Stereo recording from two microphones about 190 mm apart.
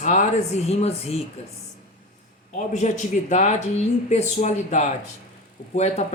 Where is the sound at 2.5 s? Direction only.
40° left (ahead or behind).